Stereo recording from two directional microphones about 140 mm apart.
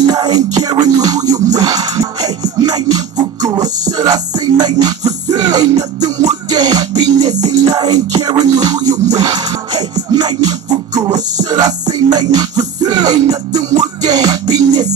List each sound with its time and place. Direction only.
0.0 s music: 30° right (ahead or behind)